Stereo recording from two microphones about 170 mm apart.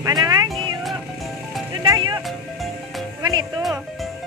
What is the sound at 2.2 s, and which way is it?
Music, centre (ahead or behind).